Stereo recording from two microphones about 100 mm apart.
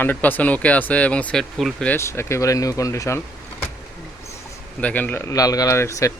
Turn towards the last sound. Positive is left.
turn(degrees=30)  # may be behind; listen again after turning